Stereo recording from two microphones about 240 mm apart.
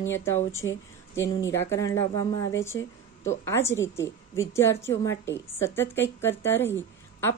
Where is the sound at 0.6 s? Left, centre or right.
Left.